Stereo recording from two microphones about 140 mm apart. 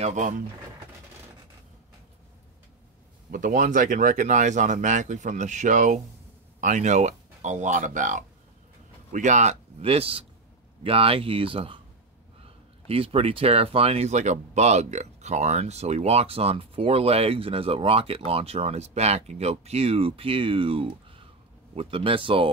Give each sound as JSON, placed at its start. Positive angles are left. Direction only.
{"t": 0.0, "sound": "speech", "side_deg": -60}
{"t": 3.3, "sound": "speech", "side_deg": -70}
{"t": 12.8, "sound": "speech", "side_deg": -45}